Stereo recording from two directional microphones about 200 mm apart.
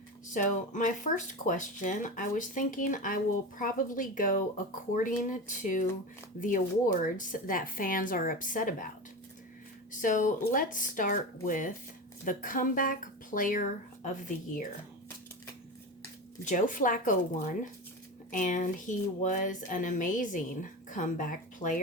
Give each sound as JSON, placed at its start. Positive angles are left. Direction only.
{"t": 0.3, "sound": "speech", "side_deg": 40}
{"t": 9.9, "sound": "speech", "side_deg": 40}
{"t": 16.4, "sound": "speech", "side_deg": 40}
{"t": 18.3, "sound": "speech", "side_deg": 40}